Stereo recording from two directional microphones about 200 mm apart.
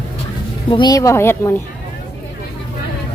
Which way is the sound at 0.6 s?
25° left (ahead or behind).